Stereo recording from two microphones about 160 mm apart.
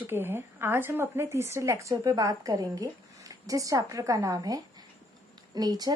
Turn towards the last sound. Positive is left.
turn(degrees=-25)  # may be behind; listen again after turning